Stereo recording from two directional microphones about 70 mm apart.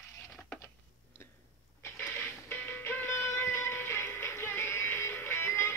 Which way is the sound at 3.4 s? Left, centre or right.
Left.